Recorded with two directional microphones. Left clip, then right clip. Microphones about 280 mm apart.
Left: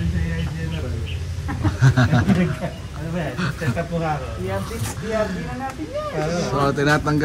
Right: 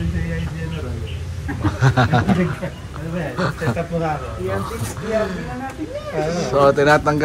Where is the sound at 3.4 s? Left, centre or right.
Centre.